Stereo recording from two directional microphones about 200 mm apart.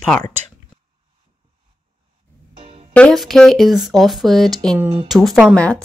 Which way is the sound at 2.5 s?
25° right (ahead or behind).